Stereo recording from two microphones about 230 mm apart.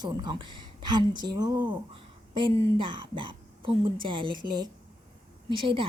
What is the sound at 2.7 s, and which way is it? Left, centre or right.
A woman's voice, right.